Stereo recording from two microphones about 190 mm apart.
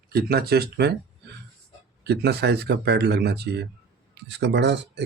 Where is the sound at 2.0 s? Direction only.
60° right (ahead or behind).